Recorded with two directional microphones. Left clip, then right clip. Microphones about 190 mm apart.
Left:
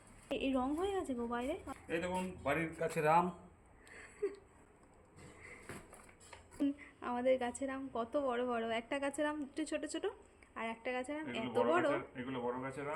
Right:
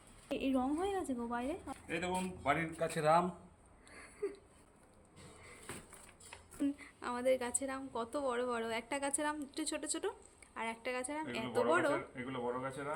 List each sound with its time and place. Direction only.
0.3 s a woman's voice: 5° right (ahead or behind)
3.9 s wheeze: 5° right (ahead or behind)
6.6 s a woman's voice: 5° left (ahead or behind)
11.9 s a woman's voice: 20° right (ahead or behind)